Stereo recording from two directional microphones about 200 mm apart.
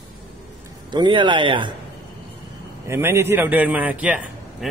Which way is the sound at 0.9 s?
20° right (ahead or behind).